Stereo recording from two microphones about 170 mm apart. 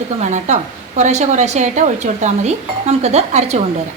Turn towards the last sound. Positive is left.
turn(degrees=-40)  # may be behind; listen again after turning